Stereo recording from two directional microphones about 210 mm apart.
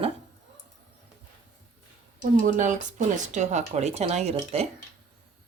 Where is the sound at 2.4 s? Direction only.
35° right (ahead or behind).